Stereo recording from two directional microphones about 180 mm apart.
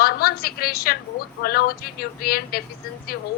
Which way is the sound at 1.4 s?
60° left (ahead or behind).